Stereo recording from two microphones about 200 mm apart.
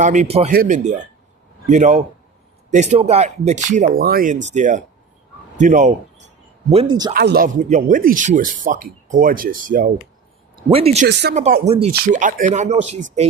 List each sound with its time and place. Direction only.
0.0 s speech: 35° right (ahead or behind)
6.7 s speech: 25° right (ahead or behind)
7.1 s speech: 50° right (ahead or behind)
10.7 s speech: 30° right (ahead or behind)